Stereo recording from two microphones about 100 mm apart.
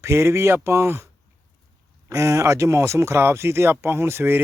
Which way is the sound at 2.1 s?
30° right (ahead or behind).